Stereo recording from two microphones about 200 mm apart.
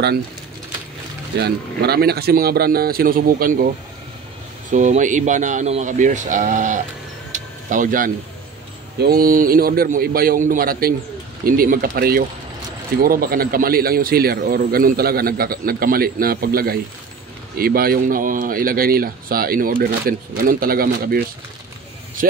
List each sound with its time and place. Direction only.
1.4 s a man's voice: 55° right (ahead or behind)
4.7 s speech: 40° right (ahead or behind)
7.3 s a sound: 40° right (ahead or behind)
9.1 s a man's voice: 45° right (ahead or behind)